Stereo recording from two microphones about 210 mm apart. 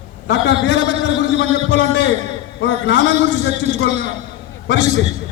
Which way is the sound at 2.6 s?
55° left (ahead or behind).